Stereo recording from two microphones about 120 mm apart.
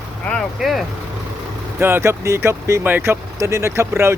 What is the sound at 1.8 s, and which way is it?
Speech, 20° right (ahead or behind).